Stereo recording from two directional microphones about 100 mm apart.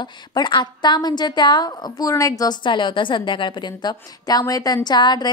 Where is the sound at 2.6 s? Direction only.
50° left (ahead or behind).